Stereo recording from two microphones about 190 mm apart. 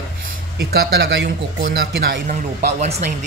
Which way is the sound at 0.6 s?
60° right (ahead or behind).